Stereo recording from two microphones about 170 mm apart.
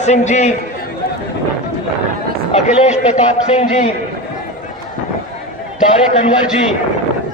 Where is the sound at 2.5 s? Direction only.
45° left (ahead or behind).